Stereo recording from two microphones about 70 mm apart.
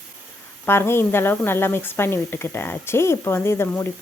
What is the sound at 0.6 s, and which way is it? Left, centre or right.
Speech, left.